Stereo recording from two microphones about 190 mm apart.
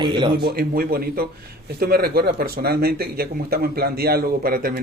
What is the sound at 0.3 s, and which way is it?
Speech, 55° right (ahead or behind).